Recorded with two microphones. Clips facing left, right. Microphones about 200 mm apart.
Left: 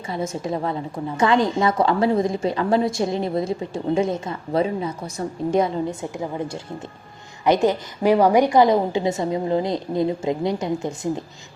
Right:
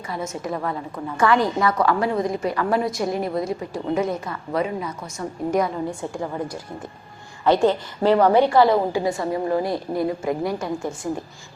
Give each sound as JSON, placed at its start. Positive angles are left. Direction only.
{"t": 0.1, "sound": "a woman's voice", "side_deg": 25}